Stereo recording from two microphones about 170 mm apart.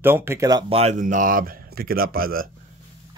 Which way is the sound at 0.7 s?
40° right (ahead or behind).